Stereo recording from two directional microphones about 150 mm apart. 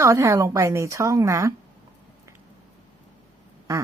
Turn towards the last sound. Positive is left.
turn(degrees=-20)  # may be behind; listen again after turning